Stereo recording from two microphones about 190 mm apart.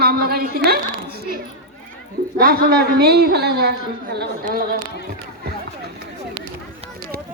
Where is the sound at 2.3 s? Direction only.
50° right (ahead or behind).